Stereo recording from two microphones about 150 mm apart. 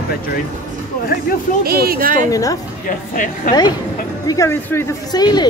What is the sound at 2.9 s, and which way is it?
Speech, 65° left (ahead or behind).